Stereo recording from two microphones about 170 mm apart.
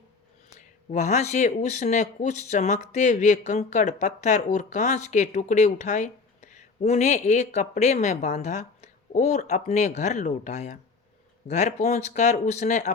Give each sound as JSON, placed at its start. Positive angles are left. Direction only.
{"t": 0.9, "sound": "speech", "side_deg": 45}